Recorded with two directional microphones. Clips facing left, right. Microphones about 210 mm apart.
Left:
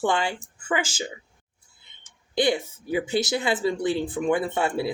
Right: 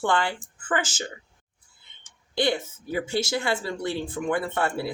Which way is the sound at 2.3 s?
15° left (ahead or behind).